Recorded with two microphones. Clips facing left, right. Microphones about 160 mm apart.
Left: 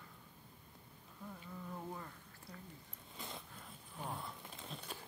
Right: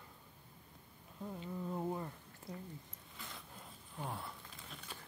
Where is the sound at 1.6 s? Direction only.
25° right (ahead or behind).